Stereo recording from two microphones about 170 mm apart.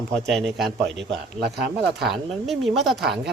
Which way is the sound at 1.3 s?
75° right (ahead or behind).